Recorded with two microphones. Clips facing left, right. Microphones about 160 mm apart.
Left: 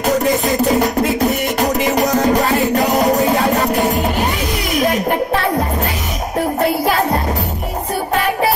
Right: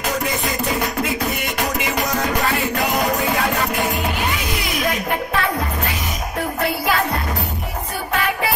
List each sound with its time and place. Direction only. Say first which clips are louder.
0.0 s music: left 8 dB; 40° left (ahead or behind)